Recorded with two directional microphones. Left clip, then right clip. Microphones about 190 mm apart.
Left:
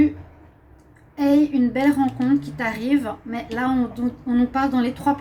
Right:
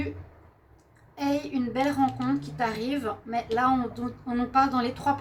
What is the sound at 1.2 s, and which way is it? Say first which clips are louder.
Speech: left 10 dB; 45° right (ahead or behind).